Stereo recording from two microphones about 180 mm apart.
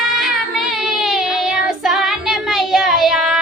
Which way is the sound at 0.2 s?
Centre (ahead or behind).